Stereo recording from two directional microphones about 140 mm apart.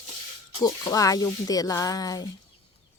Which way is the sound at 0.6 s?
25° left (ahead or behind).